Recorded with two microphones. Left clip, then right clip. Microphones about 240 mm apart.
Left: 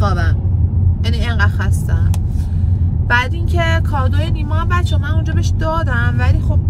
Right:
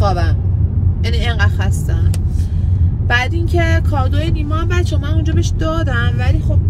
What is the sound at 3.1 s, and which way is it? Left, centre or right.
Speech, centre.